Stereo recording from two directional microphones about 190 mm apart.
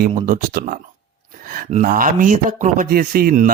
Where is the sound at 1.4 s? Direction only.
50° right (ahead or behind).